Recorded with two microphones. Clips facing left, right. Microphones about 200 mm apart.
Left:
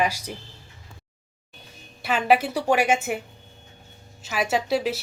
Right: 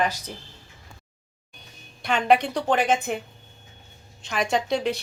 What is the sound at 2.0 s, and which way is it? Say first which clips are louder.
A woman's voice: even; 5° left (ahead or behind).